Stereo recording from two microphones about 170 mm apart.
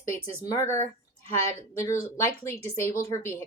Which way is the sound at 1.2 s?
40° right (ahead or behind).